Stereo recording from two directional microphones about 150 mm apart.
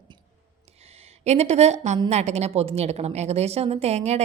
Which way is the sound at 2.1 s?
45° right (ahead or behind).